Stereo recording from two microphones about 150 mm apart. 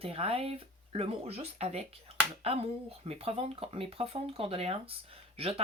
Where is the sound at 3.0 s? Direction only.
40° right (ahead or behind).